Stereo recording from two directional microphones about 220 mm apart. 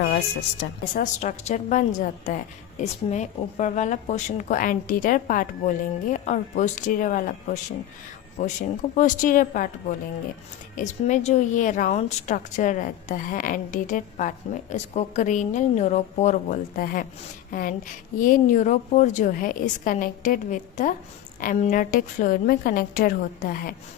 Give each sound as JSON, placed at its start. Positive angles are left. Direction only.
{"t": 0.6, "sound": "a woman's voice", "side_deg": 50}
{"t": 1.2, "sound": "a woman's voice", "side_deg": 30}
{"t": 10.8, "sound": "a woman's voice", "side_deg": 30}